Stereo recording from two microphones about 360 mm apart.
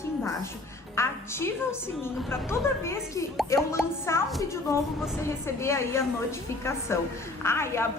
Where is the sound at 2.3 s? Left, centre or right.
Centre.